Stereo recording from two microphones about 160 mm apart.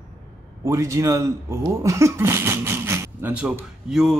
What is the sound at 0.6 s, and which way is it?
A man's voice, 20° right (ahead or behind).